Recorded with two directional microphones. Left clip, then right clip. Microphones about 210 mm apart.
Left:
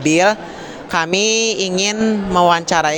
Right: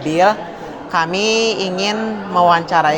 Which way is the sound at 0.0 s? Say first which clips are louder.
Even; 50° left (ahead or behind).